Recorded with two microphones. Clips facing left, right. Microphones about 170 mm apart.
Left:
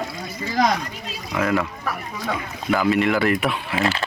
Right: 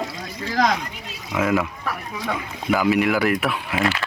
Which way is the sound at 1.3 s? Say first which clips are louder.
Right 1 dB; 20° right (ahead or behind).